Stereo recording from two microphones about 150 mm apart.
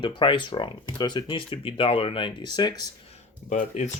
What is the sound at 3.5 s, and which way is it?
Speech, 50° left (ahead or behind).